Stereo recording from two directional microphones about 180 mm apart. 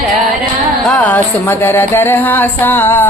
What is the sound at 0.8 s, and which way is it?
Music, 5° left (ahead or behind).